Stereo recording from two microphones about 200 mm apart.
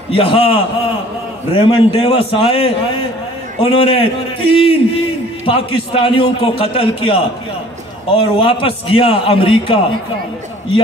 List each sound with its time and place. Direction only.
0.1 s a man's voice: 30° left (ahead or behind)